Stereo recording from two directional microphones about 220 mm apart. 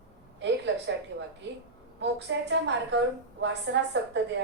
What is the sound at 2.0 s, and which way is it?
A woman's voice, 50° right (ahead or behind).